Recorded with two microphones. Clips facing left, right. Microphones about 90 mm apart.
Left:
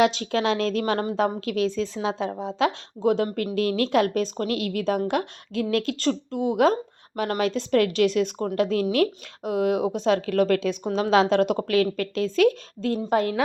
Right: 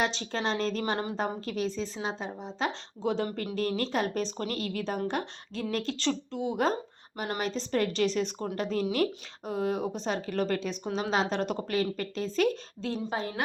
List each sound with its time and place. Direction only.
0.0 s a woman's voice: 65° left (ahead or behind)
3.3 s a woman's voice: 65° left (ahead or behind)
8.5 s a woman's voice: 70° left (ahead or behind); by 12.5 s 90° left
12.8 s a woman's voice: 60° left (ahead or behind); by 13.4 s 80° left